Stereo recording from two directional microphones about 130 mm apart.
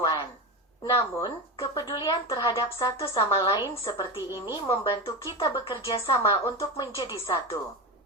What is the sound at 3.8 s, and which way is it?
A woman's voice, 35° left (ahead or behind).